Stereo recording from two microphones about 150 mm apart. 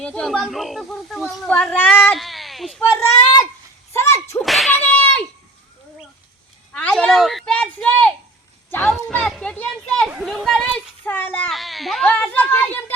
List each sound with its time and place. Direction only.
0.0 s a child's voice: 5° left (ahead or behind)
2.1 s speech: centre (ahead or behind)
2.8 s speech: 15° left (ahead or behind)
3.9 s whip: 20° left (ahead or behind)
4.4 s a sound: centre (ahead or behind)
6.7 s a child's voice: 5° left (ahead or behind)